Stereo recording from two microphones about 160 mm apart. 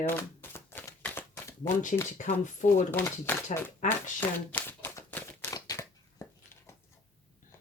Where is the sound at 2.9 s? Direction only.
15° left (ahead or behind).